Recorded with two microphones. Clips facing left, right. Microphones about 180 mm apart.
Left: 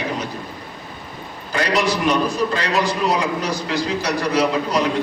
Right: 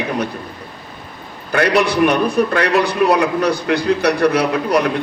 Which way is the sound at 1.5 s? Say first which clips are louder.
Right 5 dB; 60° right (ahead or behind).